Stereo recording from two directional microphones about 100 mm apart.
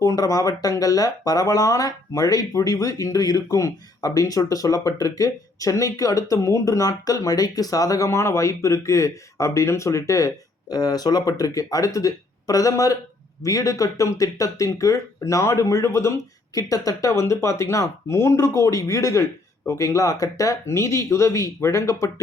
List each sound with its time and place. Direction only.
0.0 s speech: 35° left (ahead or behind)